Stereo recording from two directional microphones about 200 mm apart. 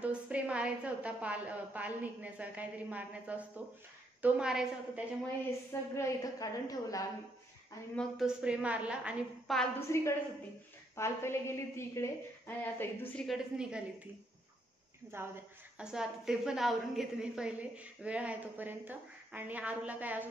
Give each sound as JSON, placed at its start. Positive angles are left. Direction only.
{"t": 0.0, "sound": "a woman's voice", "side_deg": -5}
{"t": 5.7, "sound": "a woman's voice", "side_deg": 15}
{"t": 7.9, "sound": "a woman's voice", "side_deg": 0}
{"t": 9.6, "sound": "a woman's voice", "side_deg": 15}
{"t": 13.3, "sound": "a woman's voice", "side_deg": -5}
{"t": 15.1, "sound": "a woman's voice", "side_deg": -10}